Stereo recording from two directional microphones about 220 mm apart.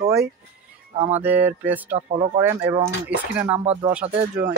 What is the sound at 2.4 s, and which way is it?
Speech, 10° right (ahead or behind).